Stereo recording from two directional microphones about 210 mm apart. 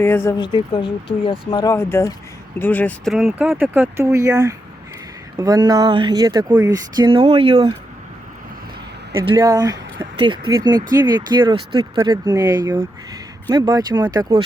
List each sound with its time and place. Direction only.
0.0 s speech: 10° left (ahead or behind); by 7.7 s 25° right (ahead or behind)
9.1 s speech: 15° right (ahead or behind)